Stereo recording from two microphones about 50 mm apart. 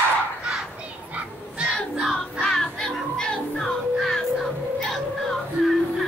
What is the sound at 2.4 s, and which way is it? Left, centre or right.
Music, centre.